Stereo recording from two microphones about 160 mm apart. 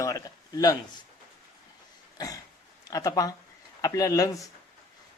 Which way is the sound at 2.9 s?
20° left (ahead or behind).